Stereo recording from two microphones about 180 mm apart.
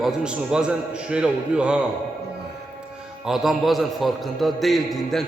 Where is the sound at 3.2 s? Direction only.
Centre (ahead or behind).